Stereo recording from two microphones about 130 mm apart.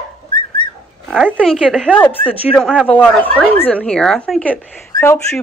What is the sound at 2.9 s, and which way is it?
A woman's voice, 10° left (ahead or behind).